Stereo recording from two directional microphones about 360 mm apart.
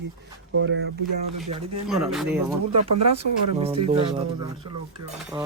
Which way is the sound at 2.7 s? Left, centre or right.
Right.